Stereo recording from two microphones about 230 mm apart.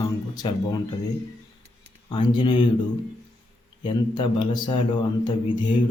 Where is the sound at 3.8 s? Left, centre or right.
Left.